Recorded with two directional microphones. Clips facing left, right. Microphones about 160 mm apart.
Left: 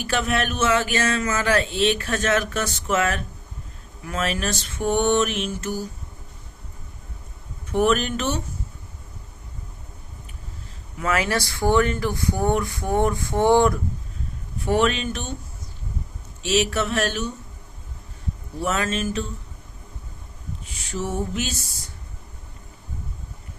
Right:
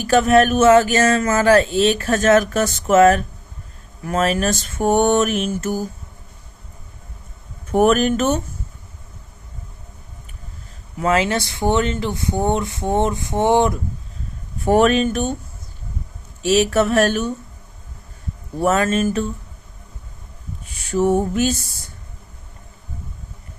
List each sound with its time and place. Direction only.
0.0 s speech: 45° right (ahead or behind)
7.7 s speech: 45° right (ahead or behind)
11.0 s speech: 25° right (ahead or behind)
14.6 s speech: 45° right (ahead or behind)
16.4 s speech: 45° right (ahead or behind)
18.6 s speech: 50° right (ahead or behind)
20.7 s speech: 55° right (ahead or behind)